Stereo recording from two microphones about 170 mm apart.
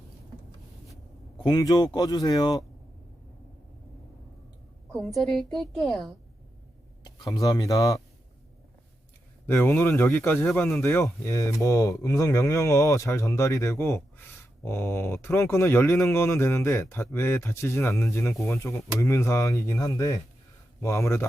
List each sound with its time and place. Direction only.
1.5 s speech: 20° left (ahead or behind)
4.9 s a woman's voice: centre (ahead or behind)
7.0 s a sound: 25° left (ahead or behind)
7.4 s speech: 20° left (ahead or behind)
9.8 s speech: 10° left (ahead or behind)